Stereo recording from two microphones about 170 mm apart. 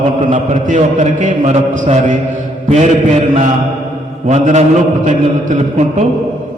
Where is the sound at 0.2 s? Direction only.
45° right (ahead or behind).